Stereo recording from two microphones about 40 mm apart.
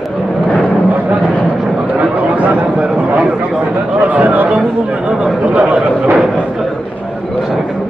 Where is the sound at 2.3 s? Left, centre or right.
Right.